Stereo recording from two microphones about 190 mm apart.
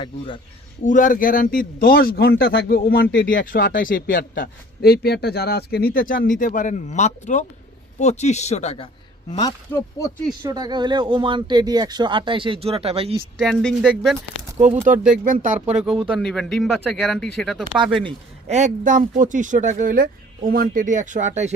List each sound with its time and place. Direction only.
0.9 s a man's voice: 45° left (ahead or behind)
9.3 s speech: 20° left (ahead or behind)
10.4 s speech: 20° right (ahead or behind)
13.4 s speech: centre (ahead or behind)
14.6 s speech: 40° right (ahead or behind)
15.7 s speech: 5° right (ahead or behind)
18.0 s speech: 35° right (ahead or behind)